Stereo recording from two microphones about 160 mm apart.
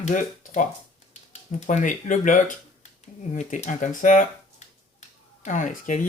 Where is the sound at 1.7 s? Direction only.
50° left (ahead or behind).